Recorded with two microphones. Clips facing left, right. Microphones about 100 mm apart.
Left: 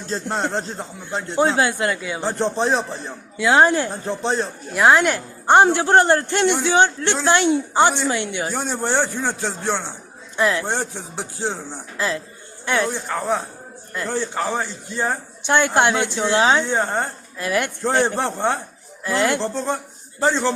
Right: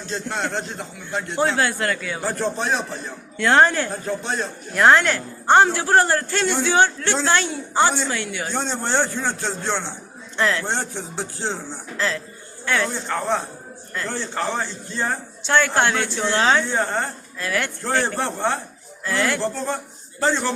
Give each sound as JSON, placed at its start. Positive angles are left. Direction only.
{"t": 0.1, "sound": "a man's voice", "side_deg": 35}
{"t": 1.5, "sound": "a man's voice", "side_deg": 20}
{"t": 3.3, "sound": "speech", "side_deg": 10}
{"t": 4.2, "sound": "a man's voice", "side_deg": 30}
{"t": 4.7, "sound": "a man's voice", "side_deg": 10}
{"t": 13.1, "sound": "a man's voice", "side_deg": 10}